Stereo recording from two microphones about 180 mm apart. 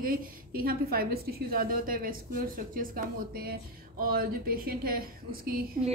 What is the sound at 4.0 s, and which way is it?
A woman's voice, 55° right (ahead or behind).